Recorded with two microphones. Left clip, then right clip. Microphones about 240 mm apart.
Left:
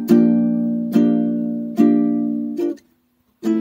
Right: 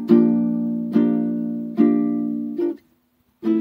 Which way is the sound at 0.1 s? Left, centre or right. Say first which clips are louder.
Left 1 dB; left.